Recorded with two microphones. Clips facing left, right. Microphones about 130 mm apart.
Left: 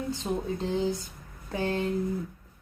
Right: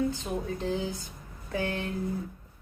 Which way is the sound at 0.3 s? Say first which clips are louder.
Left 3 dB; 30° left (ahead or behind).